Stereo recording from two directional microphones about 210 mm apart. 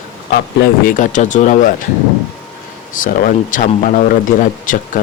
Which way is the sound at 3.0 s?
40° left (ahead or behind).